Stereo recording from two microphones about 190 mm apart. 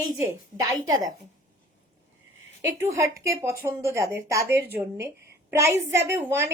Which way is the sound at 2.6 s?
15° right (ahead or behind).